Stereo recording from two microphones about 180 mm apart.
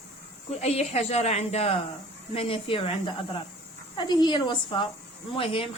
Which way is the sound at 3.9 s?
25° left (ahead or behind).